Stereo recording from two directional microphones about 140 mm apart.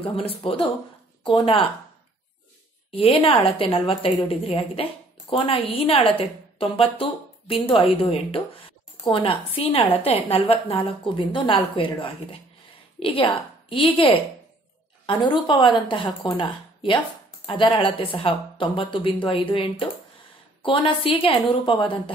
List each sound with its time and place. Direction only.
0.0 s a woman's voice: 40° left (ahead or behind)
2.9 s a woman's voice: 40° left (ahead or behind)